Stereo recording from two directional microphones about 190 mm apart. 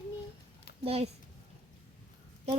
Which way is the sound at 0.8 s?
30° right (ahead or behind).